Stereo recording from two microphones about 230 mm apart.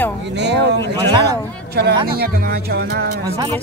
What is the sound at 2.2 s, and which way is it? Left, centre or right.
Speech, right.